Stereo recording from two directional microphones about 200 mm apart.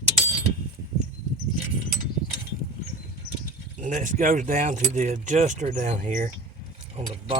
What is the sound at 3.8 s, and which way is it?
Speech, 40° right (ahead or behind).